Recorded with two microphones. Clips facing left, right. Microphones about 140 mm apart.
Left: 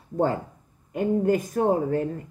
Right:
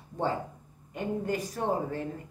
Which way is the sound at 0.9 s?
50° left (ahead or behind).